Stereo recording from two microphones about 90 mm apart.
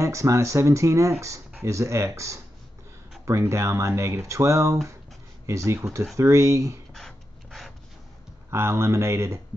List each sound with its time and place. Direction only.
0.0 s speech: 35° right (ahead or behind)
6.9 s a sound: 5° left (ahead or behind)
8.5 s speech: 30° right (ahead or behind)